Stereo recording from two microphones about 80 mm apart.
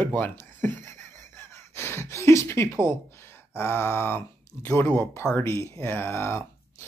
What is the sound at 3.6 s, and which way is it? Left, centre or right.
Speech, left.